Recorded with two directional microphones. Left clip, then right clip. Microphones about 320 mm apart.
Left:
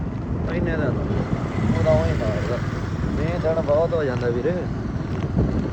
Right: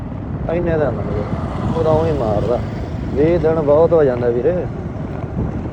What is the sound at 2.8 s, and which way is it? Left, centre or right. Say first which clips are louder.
Vehicle: right 8 dB; centre.